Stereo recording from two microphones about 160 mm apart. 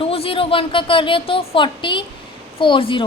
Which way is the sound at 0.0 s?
35° left (ahead or behind).